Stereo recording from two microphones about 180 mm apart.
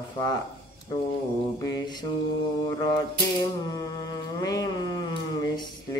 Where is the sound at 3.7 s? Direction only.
20° left (ahead or behind).